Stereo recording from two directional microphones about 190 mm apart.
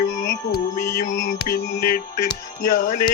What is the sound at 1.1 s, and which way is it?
Music, 70° left (ahead or behind).